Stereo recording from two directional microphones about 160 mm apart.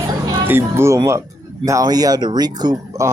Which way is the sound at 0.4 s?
15° right (ahead or behind).